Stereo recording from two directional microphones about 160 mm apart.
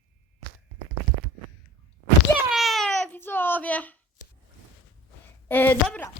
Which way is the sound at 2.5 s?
Centre (ahead or behind).